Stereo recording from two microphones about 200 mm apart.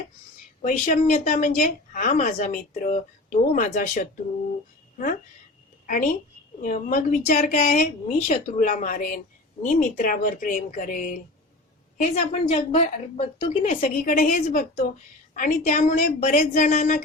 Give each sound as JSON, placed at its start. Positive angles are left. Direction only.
{"t": 0.6, "sound": "a woman's voice", "side_deg": 35}
{"t": 5.8, "sound": "a woman's voice", "side_deg": 40}
{"t": 11.9, "sound": "a woman's voice", "side_deg": 30}
{"t": 13.7, "sound": "a woman's voice", "side_deg": 40}